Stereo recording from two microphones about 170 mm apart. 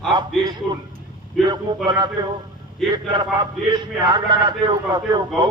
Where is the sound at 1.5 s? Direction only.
25° right (ahead or behind).